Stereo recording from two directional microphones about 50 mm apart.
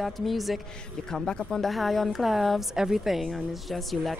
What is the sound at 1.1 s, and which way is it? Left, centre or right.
A woman's voice, centre.